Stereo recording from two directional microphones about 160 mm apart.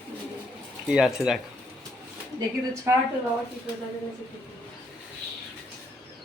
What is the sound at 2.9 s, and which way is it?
Speech, 15° right (ahead or behind).